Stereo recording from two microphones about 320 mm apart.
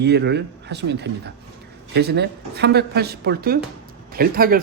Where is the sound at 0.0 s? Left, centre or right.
Right.